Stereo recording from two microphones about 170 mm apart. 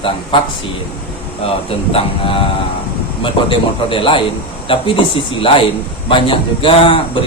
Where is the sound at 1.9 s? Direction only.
35° left (ahead or behind).